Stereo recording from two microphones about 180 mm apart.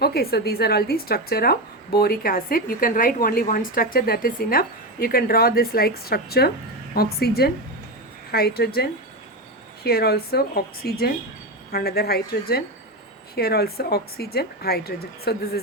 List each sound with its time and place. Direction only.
0.0 s a woman's voice: 60° left (ahead or behind)